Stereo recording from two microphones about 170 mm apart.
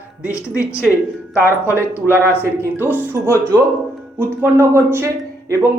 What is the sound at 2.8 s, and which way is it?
A woman's voice, 10° right (ahead or behind).